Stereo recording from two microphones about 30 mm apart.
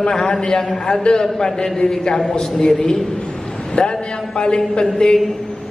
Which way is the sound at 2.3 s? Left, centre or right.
Centre.